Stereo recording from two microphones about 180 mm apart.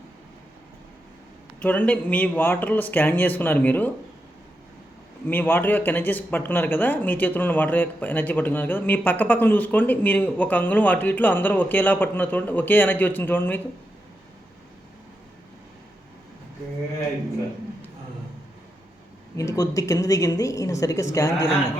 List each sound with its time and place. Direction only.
1.5 s speech: 10° left (ahead or behind)
5.2 s speech: 10° left (ahead or behind)
19.4 s speech: 15° left (ahead or behind)